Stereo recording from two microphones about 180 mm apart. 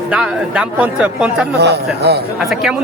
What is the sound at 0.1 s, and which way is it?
Speech, 5° right (ahead or behind).